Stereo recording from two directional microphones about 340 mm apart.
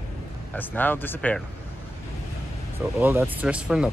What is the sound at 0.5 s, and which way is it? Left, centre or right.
Speech, centre.